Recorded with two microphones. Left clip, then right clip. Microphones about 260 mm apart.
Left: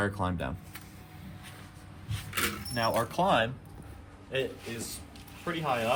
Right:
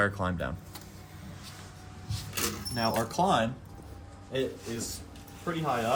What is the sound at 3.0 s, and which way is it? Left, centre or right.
Speech, left.